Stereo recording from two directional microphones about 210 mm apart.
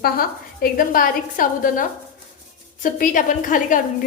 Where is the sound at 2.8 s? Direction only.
40° left (ahead or behind).